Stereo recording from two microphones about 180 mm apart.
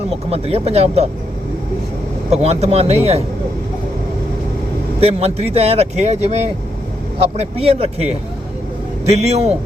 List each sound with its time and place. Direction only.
0.3 s speech: 35° right (ahead or behind)
2.3 s speech: 35° right (ahead or behind)
4.9 s speech: 35° right (ahead or behind)
9.0 s speech: 35° right (ahead or behind)